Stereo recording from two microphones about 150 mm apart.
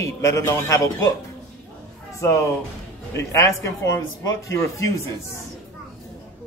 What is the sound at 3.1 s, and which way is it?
A man's voice, 20° left (ahead or behind).